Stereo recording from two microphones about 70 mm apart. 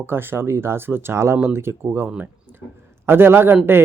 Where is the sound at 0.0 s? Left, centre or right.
Right.